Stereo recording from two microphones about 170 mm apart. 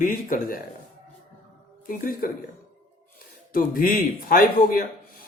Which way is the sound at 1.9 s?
55° left (ahead or behind).